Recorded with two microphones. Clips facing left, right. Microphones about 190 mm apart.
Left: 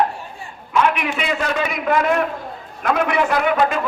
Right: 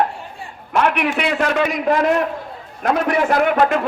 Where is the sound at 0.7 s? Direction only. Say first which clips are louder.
Right 1 dB; 65° right (ahead or behind).